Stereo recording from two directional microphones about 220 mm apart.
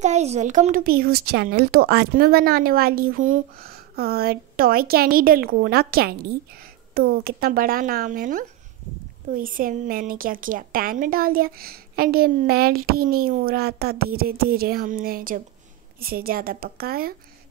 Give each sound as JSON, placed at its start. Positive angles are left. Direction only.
{"t": 0.0, "sound": "a woman's voice", "side_deg": -30}